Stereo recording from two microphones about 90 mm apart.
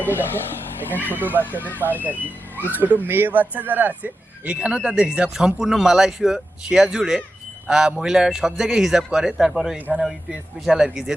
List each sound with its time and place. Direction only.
0.0 s speech: 20° left (ahead or behind)
1.8 s a man's voice: 20° right (ahead or behind); by 9.7 s 5° right (ahead or behind)
9.7 s speech: 20° right (ahead or behind)
10.0 s a man's voice: 5° right (ahead or behind)